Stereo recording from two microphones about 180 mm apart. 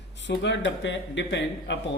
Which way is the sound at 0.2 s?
80° left.